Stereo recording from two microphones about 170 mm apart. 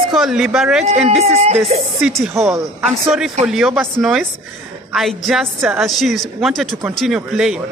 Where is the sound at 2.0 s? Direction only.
Centre (ahead or behind).